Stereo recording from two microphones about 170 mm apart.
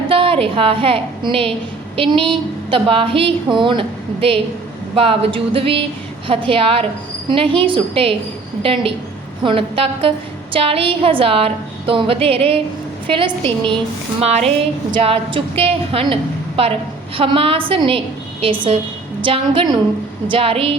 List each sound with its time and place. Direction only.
0.1 s a woman's voice: 35° right (ahead or behind)